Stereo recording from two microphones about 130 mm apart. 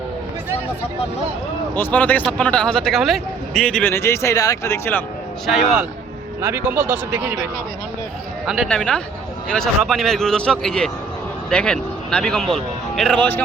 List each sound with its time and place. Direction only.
1.7 s a man's voice: 15° left (ahead or behind)
3.9 s a man's voice: 20° left (ahead or behind)
6.4 s speech: 15° right (ahead or behind)
8.4 s a man's voice: centre (ahead or behind)